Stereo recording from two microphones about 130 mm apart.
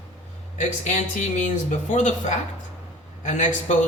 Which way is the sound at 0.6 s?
65° left (ahead or behind).